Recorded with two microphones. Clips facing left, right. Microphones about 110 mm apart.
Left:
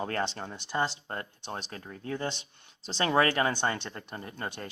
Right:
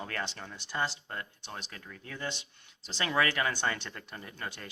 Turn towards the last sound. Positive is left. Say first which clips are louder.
# left 4 dB
turn(degrees=30)  # may be behind; listen again after turning